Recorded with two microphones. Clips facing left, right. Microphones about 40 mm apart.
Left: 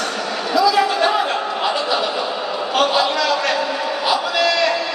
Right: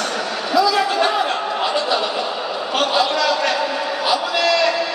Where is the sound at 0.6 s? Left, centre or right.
Centre.